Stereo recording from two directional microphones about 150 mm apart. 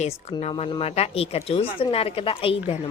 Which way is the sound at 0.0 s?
45° left (ahead or behind).